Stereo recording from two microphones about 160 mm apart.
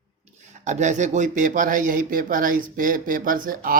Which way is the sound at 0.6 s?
50° right (ahead or behind).